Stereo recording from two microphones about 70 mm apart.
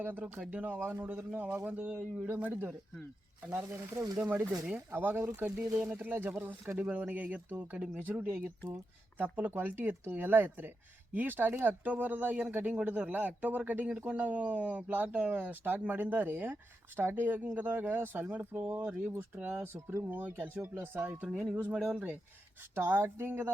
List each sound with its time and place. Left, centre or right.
0.0 s speech: right
21.0 s speech: centre
22.7 s speech: right